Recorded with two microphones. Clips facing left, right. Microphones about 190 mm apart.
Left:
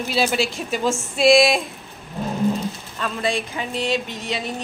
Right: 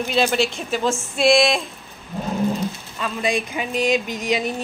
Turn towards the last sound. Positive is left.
turn(degrees=-15)  # may be behind; listen again after turning